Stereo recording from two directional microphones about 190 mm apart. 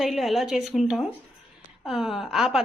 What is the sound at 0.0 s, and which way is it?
A woman's voice, centre (ahead or behind).